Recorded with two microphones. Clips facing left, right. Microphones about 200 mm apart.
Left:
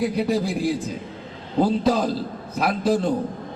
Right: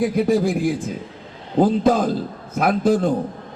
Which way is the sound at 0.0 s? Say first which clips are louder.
Right 4 dB; 50° right (ahead or behind).